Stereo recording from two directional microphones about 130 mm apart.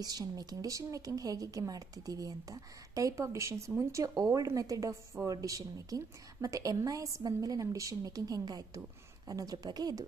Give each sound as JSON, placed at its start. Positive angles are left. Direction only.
{"t": 0.0, "sound": "speech", "side_deg": -30}